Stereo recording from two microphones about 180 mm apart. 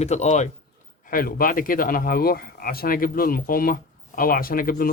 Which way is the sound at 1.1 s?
55° left (ahead or behind).